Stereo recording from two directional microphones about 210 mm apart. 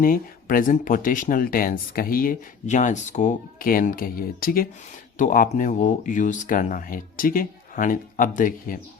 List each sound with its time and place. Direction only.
0.0 s speech: 40° left (ahead or behind)